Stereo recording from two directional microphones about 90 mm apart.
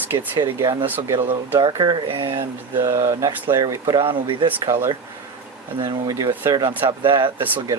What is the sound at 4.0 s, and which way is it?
Speech, 60° right (ahead or behind).